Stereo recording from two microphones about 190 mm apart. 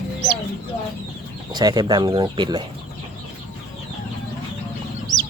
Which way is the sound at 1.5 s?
20° right (ahead or behind).